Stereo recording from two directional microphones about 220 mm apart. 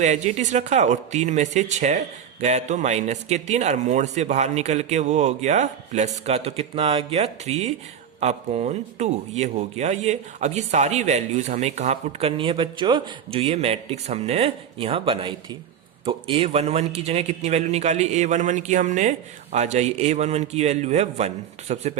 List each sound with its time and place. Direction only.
0.0 s a man's voice: 30° right (ahead or behind)